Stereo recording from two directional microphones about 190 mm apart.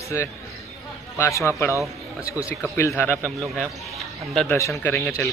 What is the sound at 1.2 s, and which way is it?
Speech, 15° left (ahead or behind).